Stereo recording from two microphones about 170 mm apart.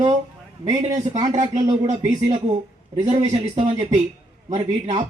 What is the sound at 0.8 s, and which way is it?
Speech, 45° right (ahead or behind).